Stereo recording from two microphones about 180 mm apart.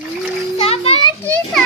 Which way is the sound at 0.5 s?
35° left (ahead or behind).